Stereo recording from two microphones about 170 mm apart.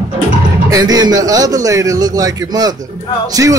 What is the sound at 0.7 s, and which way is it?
A man's voice, 20° right (ahead or behind).